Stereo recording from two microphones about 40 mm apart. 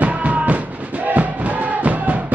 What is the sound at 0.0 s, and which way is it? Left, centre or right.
Music, right.